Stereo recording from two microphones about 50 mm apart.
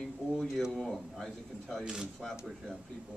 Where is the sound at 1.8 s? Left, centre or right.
Centre.